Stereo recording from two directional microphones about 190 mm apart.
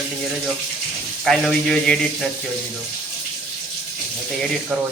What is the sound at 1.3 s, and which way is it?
A man's voice, centre (ahead or behind).